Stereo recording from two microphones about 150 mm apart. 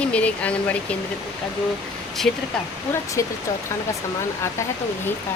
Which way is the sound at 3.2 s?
20° left (ahead or behind).